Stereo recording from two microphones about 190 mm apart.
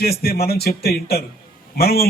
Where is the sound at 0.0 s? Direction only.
55° left (ahead or behind).